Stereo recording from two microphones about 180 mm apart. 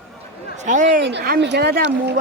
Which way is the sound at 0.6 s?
45° right (ahead or behind).